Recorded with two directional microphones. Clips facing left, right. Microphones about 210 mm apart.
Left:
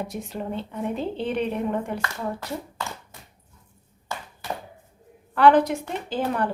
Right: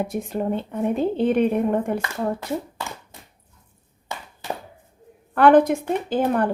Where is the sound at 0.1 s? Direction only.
50° right (ahead or behind).